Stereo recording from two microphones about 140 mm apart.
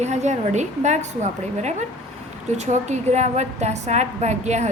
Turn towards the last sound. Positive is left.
turn(degrees=-55)  # may be behind; listen again after turning